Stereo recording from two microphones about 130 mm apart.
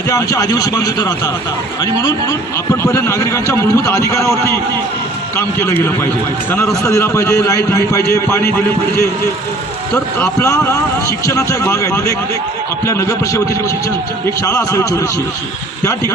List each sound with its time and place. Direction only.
0.1 s speech: 25° left (ahead or behind)
9.9 s speech: 25° left (ahead or behind)